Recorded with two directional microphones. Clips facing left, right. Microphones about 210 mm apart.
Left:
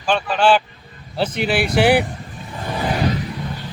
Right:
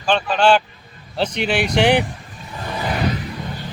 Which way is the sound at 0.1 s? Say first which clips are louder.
Even; 5° left (ahead or behind).